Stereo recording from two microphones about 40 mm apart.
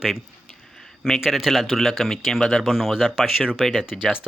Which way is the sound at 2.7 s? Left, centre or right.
Centre.